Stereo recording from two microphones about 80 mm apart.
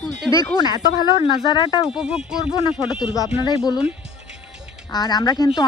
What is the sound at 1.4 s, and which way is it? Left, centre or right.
Speech, left.